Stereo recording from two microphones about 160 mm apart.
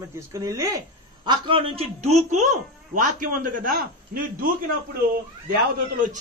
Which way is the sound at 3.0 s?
55° right (ahead or behind).